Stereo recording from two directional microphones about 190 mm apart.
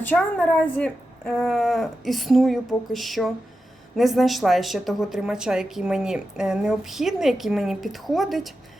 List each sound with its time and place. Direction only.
0.0 s a woman's voice: 10° left (ahead or behind)